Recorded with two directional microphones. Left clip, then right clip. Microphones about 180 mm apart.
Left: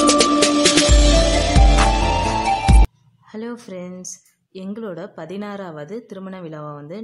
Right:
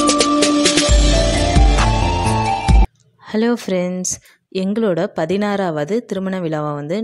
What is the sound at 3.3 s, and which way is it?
Speech, 35° right (ahead or behind).